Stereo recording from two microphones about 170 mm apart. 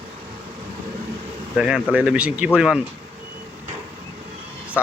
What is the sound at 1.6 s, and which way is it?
Speech, 5° right (ahead or behind).